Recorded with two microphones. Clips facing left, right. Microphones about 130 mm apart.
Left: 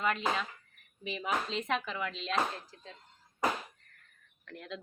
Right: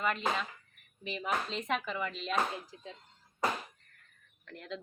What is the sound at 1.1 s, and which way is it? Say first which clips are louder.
A woman's voice: left 1 dB; centre (ahead or behind).